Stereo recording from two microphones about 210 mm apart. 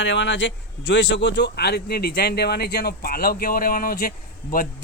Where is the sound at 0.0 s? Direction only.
60° left (ahead or behind).